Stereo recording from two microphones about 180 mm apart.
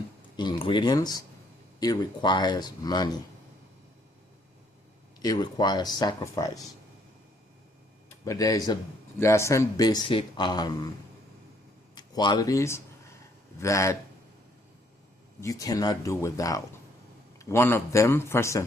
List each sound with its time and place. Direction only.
0.3 s speech: 25° left (ahead or behind)
5.2 s speech: 20° left (ahead or behind)
8.2 s speech: 20° left (ahead or behind)
11.9 s a man's voice: 25° left (ahead or behind)
15.4 s a man's voice: 20° left (ahead or behind)